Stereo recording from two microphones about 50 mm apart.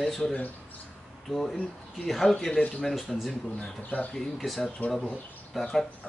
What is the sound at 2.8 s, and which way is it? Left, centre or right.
Speech, centre.